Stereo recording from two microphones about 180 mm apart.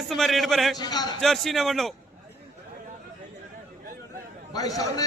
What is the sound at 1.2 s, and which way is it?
Speech, centre (ahead or behind).